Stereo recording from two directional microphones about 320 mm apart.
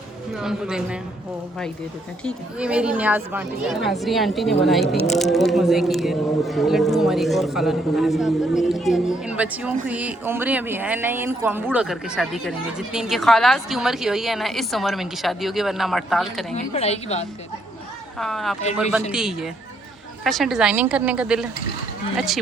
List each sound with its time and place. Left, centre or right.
0.3 s speech: centre
2.2 s speech: centre
16.6 s a woman's voice: centre
18.2 s speech: centre